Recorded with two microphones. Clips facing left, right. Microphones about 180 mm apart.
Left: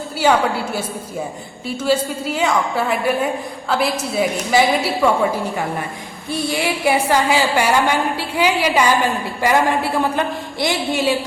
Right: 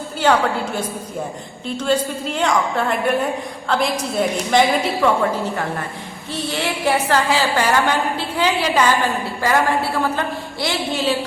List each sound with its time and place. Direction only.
0.2 s a woman's voice: 10° left (ahead or behind)